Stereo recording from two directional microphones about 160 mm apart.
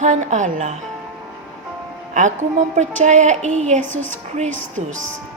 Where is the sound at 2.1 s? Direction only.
50° right (ahead or behind).